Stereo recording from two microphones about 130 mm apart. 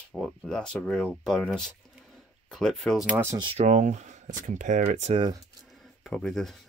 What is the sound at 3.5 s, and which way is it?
Speech, 65° right (ahead or behind).